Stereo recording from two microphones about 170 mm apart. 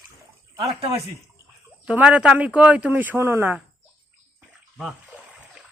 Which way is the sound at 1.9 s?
5° right (ahead or behind).